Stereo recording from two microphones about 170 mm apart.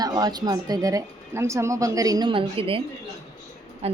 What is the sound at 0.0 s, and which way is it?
A woman's voice, 25° right (ahead or behind).